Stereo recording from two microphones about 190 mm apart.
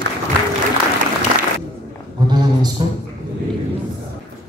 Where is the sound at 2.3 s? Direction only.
20° right (ahead or behind).